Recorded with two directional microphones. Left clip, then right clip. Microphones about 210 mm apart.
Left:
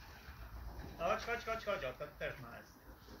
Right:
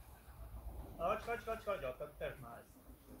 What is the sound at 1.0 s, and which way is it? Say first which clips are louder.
Speech: left 1 dB; 40° left (ahead or behind).